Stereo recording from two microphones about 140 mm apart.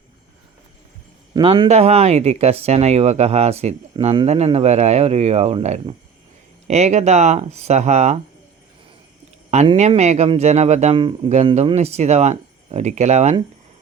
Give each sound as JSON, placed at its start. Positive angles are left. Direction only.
{"t": 1.3, "sound": "speech", "side_deg": -35}
{"t": 9.7, "sound": "speech", "side_deg": -50}
{"t": 10.9, "sound": "speech", "side_deg": -35}
{"t": 11.5, "sound": "speech", "side_deg": -50}